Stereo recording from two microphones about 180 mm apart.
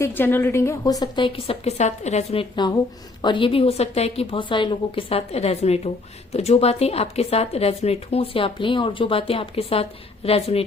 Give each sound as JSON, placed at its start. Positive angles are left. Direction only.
{"t": 0.0, "sound": "a woman's voice", "side_deg": 10}